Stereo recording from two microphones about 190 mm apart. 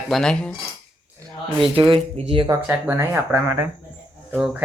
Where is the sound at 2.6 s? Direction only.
10° right (ahead or behind).